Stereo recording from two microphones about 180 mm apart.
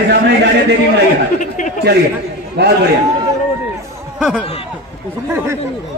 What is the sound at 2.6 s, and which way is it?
Speech, 65° right (ahead or behind).